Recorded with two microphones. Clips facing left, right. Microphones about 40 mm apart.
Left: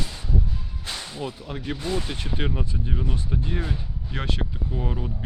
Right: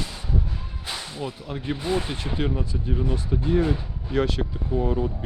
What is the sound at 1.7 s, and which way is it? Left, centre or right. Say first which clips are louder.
Speech: right 3 dB; centre.